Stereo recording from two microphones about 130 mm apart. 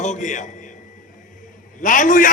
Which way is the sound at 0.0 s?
70° left (ahead or behind).